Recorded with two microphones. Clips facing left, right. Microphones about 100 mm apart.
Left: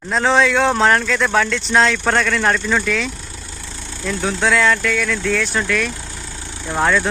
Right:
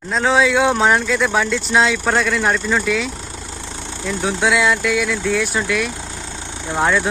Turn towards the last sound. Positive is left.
turn(degrees=-15)  # may be behind; listen again after turning